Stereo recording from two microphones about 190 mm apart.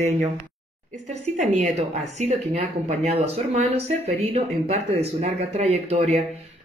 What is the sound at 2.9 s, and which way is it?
Speech, 35° right (ahead or behind).